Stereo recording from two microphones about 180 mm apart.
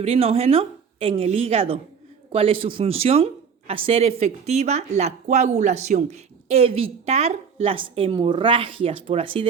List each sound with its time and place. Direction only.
0.0 s speech: 35° right (ahead or behind)